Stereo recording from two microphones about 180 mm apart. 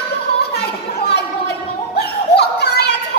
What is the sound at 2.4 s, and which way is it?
Children playing, 65° left (ahead or behind).